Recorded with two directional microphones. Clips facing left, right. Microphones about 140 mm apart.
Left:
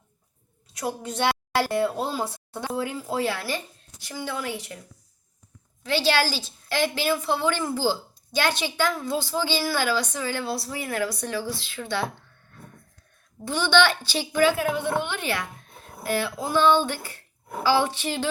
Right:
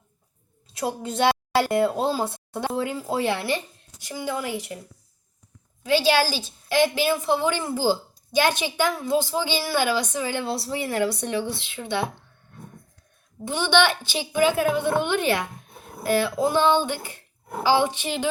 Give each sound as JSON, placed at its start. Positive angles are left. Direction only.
{"t": 0.7, "sound": "a woman's voice", "side_deg": -25}
{"t": 5.8, "sound": "a woman's voice", "side_deg": -15}